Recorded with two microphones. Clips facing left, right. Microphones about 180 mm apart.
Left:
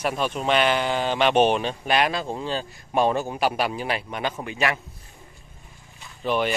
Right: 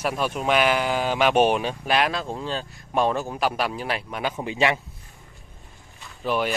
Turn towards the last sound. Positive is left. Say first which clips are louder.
# left 1 dB
turn(degrees=-5)  # may be behind; listen again after turning